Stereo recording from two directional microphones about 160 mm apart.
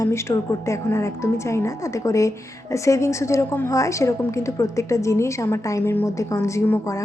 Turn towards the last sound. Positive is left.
turn(degrees=20)  # may be behind; listen again after turning